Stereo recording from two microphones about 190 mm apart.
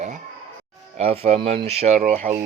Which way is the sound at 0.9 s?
30° right (ahead or behind).